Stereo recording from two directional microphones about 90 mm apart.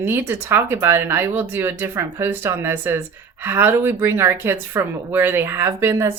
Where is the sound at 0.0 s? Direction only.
25° right (ahead or behind).